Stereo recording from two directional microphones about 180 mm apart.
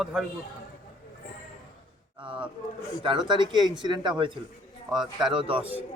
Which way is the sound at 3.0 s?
25° right (ahead or behind).